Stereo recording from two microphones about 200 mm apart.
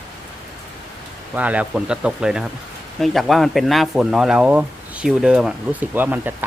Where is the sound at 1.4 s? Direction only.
5° right (ahead or behind).